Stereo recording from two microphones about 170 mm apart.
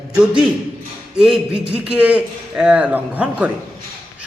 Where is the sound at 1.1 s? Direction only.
5° right (ahead or behind).